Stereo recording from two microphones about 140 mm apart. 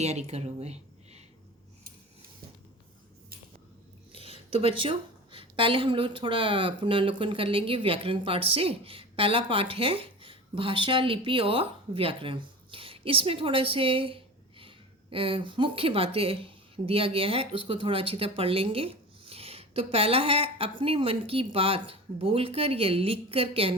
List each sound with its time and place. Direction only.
0.0 s speech: 50° right (ahead or behind)
4.1 s a woman's voice: 40° right (ahead or behind)